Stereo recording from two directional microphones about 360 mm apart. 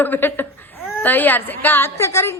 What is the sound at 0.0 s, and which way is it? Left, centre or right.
A woman's voice, centre.